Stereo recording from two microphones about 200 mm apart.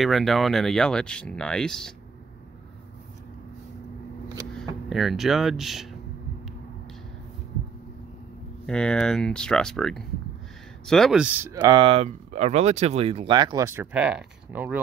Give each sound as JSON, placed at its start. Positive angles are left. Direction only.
{"t": 0.0, "sound": "speech", "side_deg": 0}
{"t": 4.6, "sound": "speech", "side_deg": 0}
{"t": 8.6, "sound": "speech", "side_deg": 5}
{"t": 11.6, "sound": "speech", "side_deg": -25}